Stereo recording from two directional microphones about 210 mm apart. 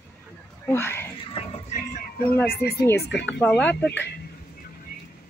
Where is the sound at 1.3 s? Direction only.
30° left (ahead or behind).